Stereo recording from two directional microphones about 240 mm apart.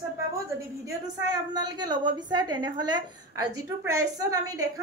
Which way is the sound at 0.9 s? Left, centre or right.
Centre.